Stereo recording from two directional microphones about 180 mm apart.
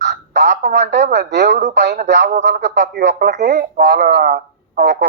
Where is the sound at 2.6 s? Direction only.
75° right (ahead or behind).